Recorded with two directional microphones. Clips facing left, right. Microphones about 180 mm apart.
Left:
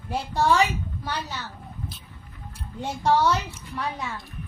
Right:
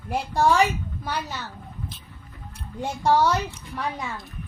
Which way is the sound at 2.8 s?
10° right (ahead or behind).